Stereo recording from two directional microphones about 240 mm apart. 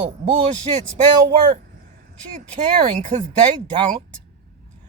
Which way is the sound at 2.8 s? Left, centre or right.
Right.